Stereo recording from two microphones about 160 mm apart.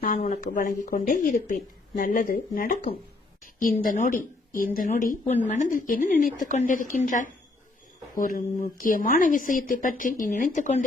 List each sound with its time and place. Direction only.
0.4 s a woman's voice: 55° left (ahead or behind)